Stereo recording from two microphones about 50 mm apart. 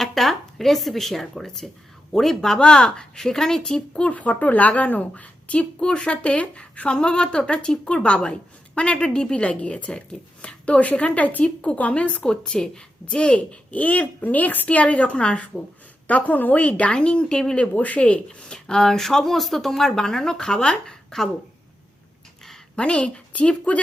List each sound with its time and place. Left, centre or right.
0.0 s speech: centre
4.1 s a woman's voice: left
16.0 s a woman's voice: left
17.6 s a woman's voice: left
18.3 s speech: centre
22.4 s a woman's voice: centre